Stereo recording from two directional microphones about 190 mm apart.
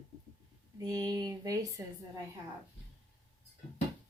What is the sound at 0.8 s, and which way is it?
Speech, 20° right (ahead or behind).